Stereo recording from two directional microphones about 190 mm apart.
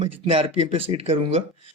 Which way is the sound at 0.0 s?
30° right (ahead or behind).